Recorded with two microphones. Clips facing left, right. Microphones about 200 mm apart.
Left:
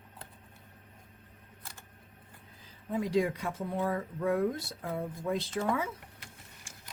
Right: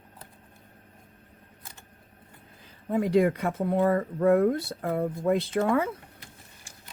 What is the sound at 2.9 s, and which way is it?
Speech, 60° right (ahead or behind).